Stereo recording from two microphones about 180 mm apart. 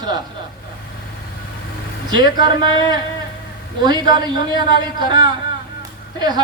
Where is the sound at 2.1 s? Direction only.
25° right (ahead or behind).